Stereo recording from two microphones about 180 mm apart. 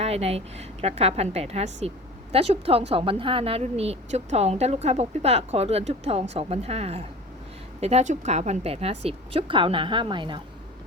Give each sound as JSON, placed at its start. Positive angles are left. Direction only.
{"t": 0.0, "sound": "speech", "side_deg": -35}